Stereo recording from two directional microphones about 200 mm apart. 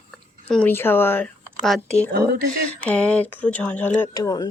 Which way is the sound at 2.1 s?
50° right (ahead or behind).